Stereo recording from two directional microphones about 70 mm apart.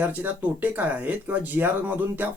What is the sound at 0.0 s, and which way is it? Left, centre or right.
Speech, right.